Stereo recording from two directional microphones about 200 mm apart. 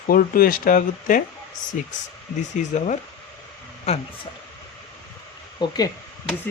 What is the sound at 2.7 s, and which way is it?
Speech, 35° left (ahead or behind).